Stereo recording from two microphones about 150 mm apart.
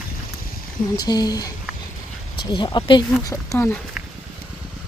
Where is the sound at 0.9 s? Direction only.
25° left (ahead or behind).